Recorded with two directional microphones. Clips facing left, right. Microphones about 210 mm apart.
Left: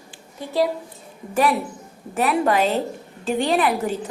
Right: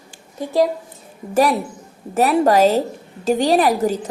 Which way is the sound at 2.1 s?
40° right (ahead or behind).